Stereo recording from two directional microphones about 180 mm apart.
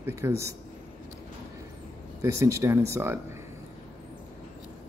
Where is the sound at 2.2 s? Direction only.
15° right (ahead or behind).